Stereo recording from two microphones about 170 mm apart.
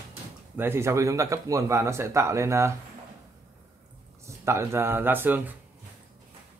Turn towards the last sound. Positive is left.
turn(degrees=-10)  # may be behind; listen again after turning